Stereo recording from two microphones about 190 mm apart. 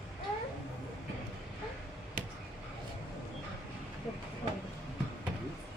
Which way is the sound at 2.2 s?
45° right (ahead or behind).